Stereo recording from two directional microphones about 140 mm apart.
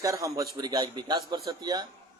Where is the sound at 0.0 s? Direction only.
20° right (ahead or behind).